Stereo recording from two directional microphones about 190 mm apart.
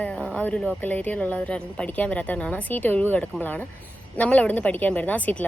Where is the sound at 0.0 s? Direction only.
5° left (ahead or behind).